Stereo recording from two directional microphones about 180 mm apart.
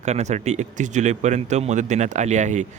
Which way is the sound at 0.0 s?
40° right (ahead or behind).